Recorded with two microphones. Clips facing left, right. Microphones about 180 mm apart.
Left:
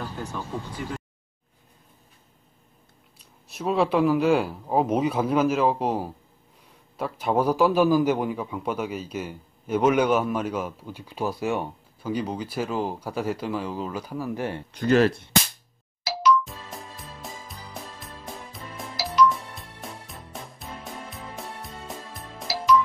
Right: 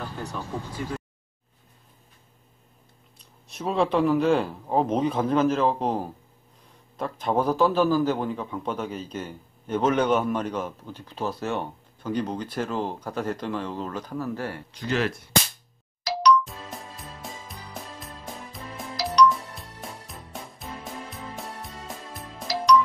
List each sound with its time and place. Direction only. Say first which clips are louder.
3.2 s a man's voice: left 1 dB; 5° left (ahead or behind)
14.7 s speech: left 8 dB; 50° left (ahead or behind)
15.0 s cap gun: left 5 dB; 25° left (ahead or behind)
16.1 s music: right 1 dB; centre (ahead or behind)